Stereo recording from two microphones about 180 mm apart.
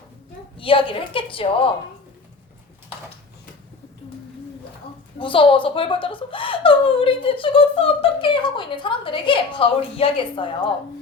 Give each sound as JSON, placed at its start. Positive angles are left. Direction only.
{"t": 0.6, "sound": "speech", "side_deg": 30}
{"t": 5.2, "sound": "speech", "side_deg": 30}